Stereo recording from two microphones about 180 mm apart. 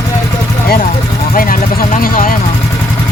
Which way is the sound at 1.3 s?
50° left (ahead or behind).